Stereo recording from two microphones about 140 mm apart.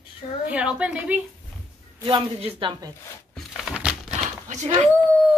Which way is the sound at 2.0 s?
35° right (ahead or behind).